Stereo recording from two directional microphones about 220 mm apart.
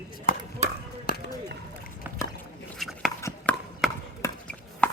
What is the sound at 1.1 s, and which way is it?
Basketball bounce, 40° left (ahead or behind).